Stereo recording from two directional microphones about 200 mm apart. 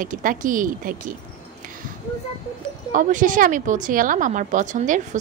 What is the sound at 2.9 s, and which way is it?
A woman's voice, 40° right (ahead or behind).